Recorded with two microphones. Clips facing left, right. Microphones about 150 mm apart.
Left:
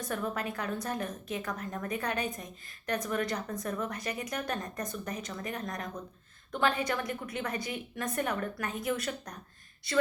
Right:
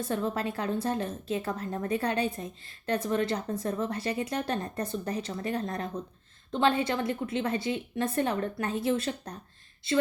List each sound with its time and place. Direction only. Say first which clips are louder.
0.0 s a woman's voice: right 4 dB; 25° right (ahead or behind)